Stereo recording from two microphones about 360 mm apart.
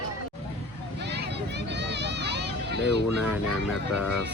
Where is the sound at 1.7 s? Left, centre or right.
Right.